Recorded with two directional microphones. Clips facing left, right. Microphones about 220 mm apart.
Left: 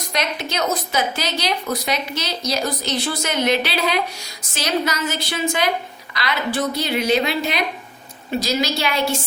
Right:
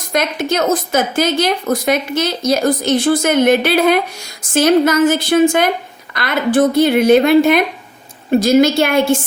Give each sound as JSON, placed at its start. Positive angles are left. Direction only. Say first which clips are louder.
{"t": 0.1, "sound": "a woman's voice", "louder": "right 8 dB", "side_deg": -50}